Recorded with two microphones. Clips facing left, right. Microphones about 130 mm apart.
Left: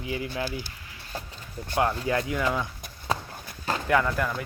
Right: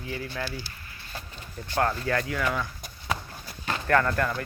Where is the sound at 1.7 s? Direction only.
15° left (ahead or behind).